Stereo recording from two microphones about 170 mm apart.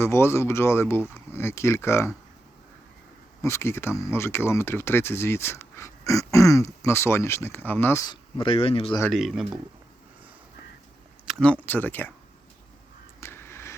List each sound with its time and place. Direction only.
0.0 s speech: 15° left (ahead or behind)
3.4 s speech: 15° left (ahead or behind)
8.1 s speech: 30° left (ahead or behind)
9.1 s speech: centre (ahead or behind)
11.3 s speech: 5° left (ahead or behind)
13.1 s vehicle: 15° left (ahead or behind)